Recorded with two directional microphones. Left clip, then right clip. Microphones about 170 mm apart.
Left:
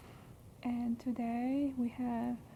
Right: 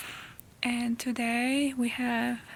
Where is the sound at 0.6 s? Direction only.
25° right (ahead or behind).